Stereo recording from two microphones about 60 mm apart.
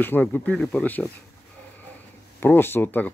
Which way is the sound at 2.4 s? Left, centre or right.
Left.